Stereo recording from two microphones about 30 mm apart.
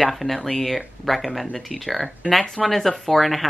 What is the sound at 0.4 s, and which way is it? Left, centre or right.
Speech, centre.